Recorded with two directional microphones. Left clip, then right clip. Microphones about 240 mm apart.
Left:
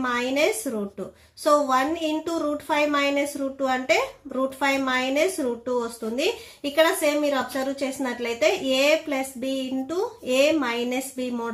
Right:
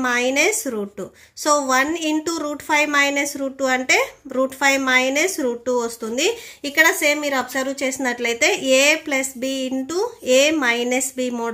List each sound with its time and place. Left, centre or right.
0.0 s a woman's voice: right